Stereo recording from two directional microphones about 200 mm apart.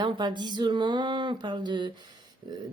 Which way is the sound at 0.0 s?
20° right (ahead or behind).